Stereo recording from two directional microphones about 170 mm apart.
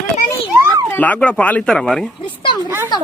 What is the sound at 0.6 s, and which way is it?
Children playing, 20° right (ahead or behind).